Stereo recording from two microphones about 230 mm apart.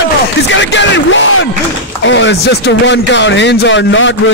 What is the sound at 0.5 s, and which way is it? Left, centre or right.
Music, left.